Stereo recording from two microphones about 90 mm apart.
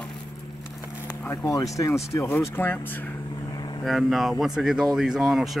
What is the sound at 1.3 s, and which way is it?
Speech, 30° left (ahead or behind).